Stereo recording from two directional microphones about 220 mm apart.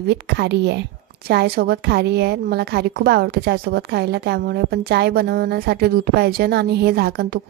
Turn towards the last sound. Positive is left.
turn(degrees=-45)  # may be behind; listen again after turning